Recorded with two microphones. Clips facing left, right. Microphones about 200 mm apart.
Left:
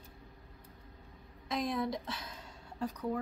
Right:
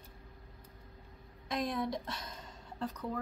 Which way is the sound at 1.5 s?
Centre (ahead or behind).